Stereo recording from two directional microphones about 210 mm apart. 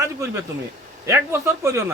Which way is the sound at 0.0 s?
15° right (ahead or behind).